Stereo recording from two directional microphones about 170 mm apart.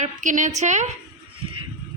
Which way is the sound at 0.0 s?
45° right (ahead or behind).